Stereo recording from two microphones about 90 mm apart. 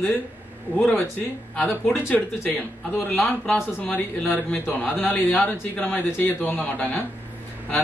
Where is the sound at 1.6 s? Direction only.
25° left (ahead or behind).